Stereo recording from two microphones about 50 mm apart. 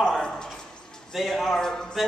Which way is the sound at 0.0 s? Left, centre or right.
Centre.